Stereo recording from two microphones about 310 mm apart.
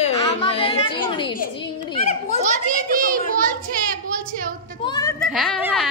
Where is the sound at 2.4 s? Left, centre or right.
Right.